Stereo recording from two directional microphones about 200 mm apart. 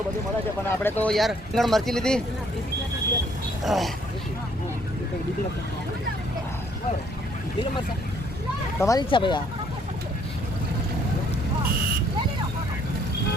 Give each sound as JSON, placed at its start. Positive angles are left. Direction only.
{"t": 0.7, "sound": "speech", "side_deg": 10}
{"t": 3.6, "sound": "speech", "side_deg": 0}
{"t": 8.8, "sound": "speech", "side_deg": 20}